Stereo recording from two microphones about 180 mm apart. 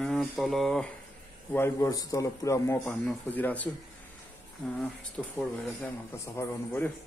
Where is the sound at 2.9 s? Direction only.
5° left (ahead or behind).